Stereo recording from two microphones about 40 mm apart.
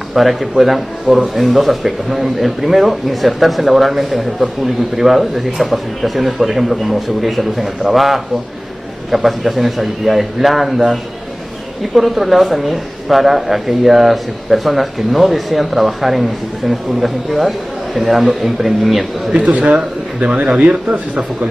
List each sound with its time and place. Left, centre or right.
0.1 s speech: centre
11.9 s speech: centre
19.3 s speech: right